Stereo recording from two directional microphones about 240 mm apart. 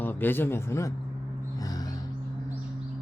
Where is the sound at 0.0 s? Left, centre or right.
Centre.